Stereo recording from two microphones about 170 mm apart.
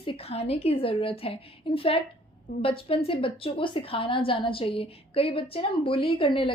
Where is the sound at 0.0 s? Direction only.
30° left (ahead or behind).